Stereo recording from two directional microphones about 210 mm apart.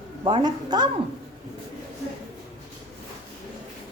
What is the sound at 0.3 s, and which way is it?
Speech, 20° right (ahead or behind).